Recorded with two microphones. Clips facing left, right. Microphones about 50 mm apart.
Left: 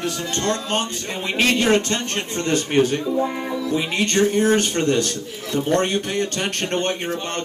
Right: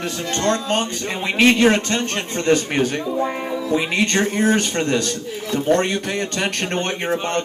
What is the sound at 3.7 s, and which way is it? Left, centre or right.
Speech, right.